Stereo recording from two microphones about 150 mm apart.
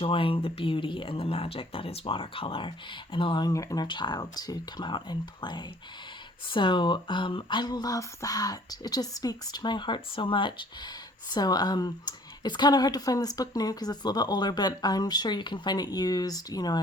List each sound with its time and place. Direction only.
0.0 s speech: 35° left (ahead or behind)